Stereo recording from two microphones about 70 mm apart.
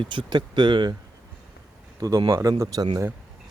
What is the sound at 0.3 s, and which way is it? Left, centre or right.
Speech, right.